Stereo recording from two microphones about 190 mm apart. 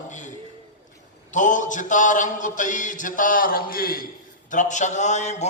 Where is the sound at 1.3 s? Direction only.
40° left (ahead or behind).